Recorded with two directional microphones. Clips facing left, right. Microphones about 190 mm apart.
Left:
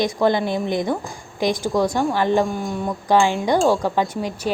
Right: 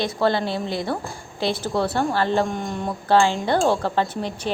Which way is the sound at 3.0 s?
15° left (ahead or behind).